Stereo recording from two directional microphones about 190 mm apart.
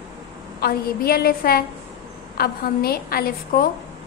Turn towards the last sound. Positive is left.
turn(degrees=50)  # may be behind; listen again after turning